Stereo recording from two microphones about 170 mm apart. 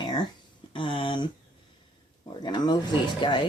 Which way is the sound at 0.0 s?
25° left (ahead or behind).